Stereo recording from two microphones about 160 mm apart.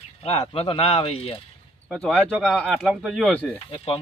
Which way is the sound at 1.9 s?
5° left (ahead or behind).